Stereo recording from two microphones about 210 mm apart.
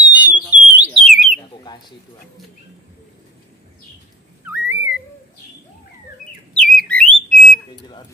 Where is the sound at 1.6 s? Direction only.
20° left (ahead or behind).